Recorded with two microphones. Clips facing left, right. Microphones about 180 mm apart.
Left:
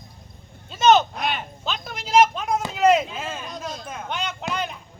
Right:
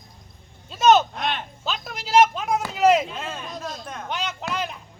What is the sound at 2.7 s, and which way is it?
Speech, centre (ahead or behind).